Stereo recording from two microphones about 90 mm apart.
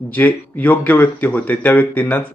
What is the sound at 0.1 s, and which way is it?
A man's voice, 20° left (ahead or behind).